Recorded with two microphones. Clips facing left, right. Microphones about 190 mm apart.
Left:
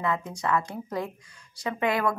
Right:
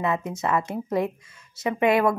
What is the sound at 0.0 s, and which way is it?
A woman's voice, 25° right (ahead or behind).